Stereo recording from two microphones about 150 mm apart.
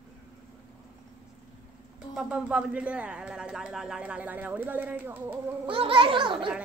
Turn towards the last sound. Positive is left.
turn(degrees=-35)  # may be behind; listen again after turning